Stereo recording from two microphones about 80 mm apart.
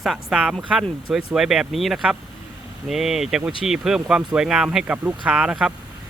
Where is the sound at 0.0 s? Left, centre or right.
Centre.